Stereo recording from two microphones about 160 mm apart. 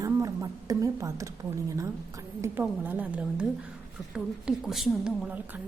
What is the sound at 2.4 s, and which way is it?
A woman's voice, 10° right (ahead or behind).